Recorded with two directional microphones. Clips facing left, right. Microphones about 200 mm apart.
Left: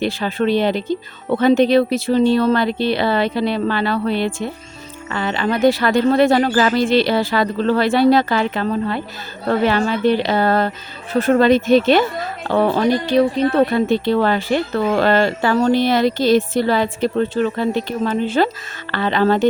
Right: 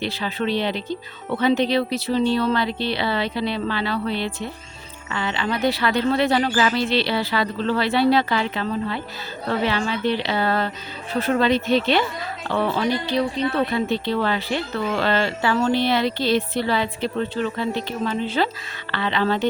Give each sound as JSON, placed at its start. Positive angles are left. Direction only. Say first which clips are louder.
{"t": 0.0, "sound": "a woman's voice", "louder": "left 6 dB", "side_deg": 50}